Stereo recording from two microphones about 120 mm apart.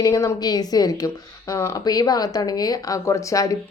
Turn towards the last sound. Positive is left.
turn(degrees=25)  # may be behind; listen again after turning